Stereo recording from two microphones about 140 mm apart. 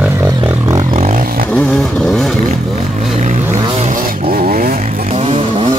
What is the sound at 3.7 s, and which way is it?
Vehicle, 50° right (ahead or behind).